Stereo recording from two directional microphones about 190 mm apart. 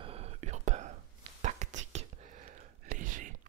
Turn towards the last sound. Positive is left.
turn(degrees=-45)  # may be behind; listen again after turning